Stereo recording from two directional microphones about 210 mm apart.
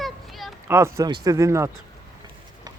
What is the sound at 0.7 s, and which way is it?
Speech, 15° right (ahead or behind).